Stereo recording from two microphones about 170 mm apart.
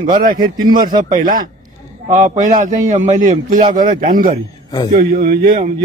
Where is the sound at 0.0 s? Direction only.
55° right (ahead or behind).